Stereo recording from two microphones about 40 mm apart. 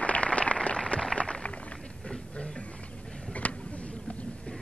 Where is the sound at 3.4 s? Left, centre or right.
Left.